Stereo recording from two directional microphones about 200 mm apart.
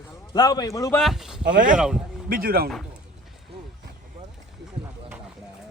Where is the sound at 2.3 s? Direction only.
50° right (ahead or behind).